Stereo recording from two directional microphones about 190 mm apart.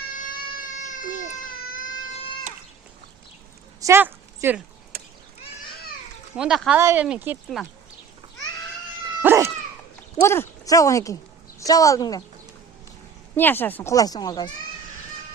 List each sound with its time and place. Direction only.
0.2 s cat: 45° left (ahead or behind)
1.5 s baby cry: 45° left (ahead or behind)
3.8 s a sound: 15° right (ahead or behind)
6.3 s speech: centre (ahead or behind)
9.2 s cat: 15° right (ahead or behind)
10.2 s a woman's voice: 15° left (ahead or behind)
13.3 s speech: 10° left (ahead or behind)